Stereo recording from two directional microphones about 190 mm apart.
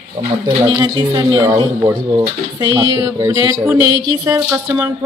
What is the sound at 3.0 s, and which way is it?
Speech, 15° right (ahead or behind).